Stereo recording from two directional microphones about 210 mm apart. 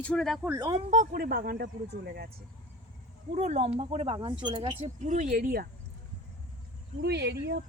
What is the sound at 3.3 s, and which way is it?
Speech, 30° right (ahead or behind).